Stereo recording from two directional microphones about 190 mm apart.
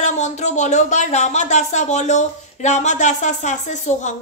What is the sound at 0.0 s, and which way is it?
Speech, 40° left (ahead or behind).